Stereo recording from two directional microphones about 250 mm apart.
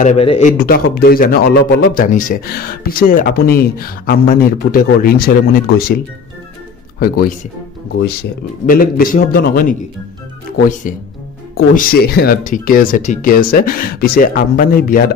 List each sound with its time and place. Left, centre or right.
0.0 s a man's voice: left
7.0 s a man's voice: left
8.6 s a man's voice: left
11.5 s a man's voice: left